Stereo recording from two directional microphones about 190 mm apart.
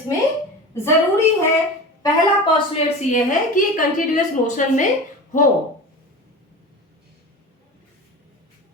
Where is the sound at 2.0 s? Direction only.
25° left (ahead or behind).